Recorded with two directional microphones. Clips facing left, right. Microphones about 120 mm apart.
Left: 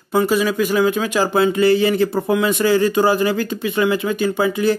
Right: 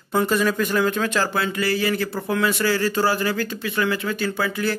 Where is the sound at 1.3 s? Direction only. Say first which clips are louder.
Left 9 dB; 20° left (ahead or behind).